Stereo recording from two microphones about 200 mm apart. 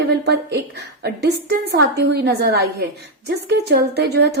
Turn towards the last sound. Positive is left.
turn(degrees=-55)  # may be behind; listen again after turning